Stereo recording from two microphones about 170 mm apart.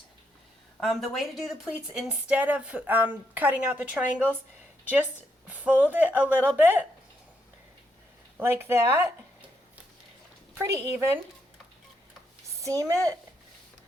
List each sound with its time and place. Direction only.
0.8 s speech: centre (ahead or behind)
5.5 s speech: 10° right (ahead or behind)
8.4 s speech: 15° right (ahead or behind)
10.5 s speech: 15° right (ahead or behind)
12.6 s speech: 20° right (ahead or behind)